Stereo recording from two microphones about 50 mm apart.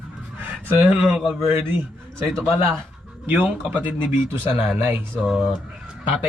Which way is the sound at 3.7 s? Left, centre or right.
Right.